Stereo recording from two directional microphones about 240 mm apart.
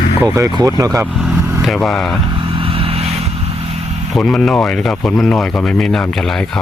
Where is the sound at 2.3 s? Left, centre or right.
Right.